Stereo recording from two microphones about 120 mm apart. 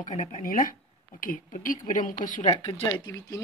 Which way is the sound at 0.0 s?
65° left (ahead or behind).